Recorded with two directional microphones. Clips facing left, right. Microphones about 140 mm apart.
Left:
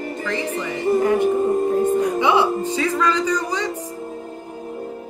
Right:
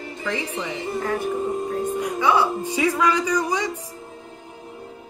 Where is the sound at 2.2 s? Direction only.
20° left (ahead or behind).